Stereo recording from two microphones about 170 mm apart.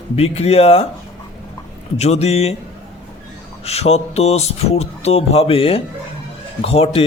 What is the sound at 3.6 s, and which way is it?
A man's voice, 40° left (ahead or behind).